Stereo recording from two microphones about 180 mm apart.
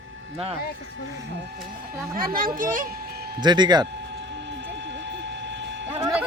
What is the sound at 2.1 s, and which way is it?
Speech, 55° right (ahead or behind).